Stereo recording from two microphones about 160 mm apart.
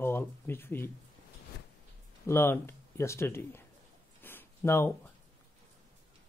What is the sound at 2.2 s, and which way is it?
Speech, 15° left (ahead or behind).